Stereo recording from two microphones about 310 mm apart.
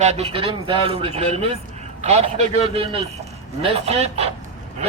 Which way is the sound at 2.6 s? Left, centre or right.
Centre.